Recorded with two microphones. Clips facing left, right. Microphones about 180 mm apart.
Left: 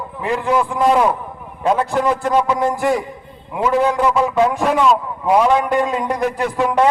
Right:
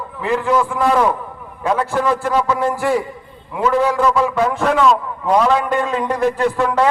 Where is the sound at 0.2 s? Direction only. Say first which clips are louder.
Right 1 dB; 15° left (ahead or behind).